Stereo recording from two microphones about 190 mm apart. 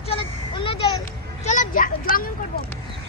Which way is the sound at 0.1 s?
30° left (ahead or behind).